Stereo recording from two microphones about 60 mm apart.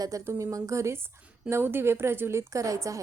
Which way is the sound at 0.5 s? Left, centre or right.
Right.